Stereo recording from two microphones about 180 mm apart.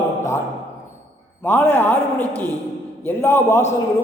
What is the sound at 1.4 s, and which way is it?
A man's voice, 10° left (ahead or behind).